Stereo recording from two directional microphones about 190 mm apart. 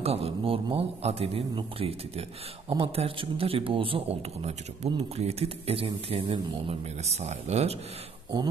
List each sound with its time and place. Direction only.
0.0 s speech: 30° right (ahead or behind)